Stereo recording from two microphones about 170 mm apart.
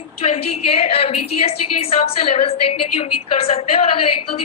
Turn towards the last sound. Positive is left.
turn(degrees=35)  # may be behind; listen again after turning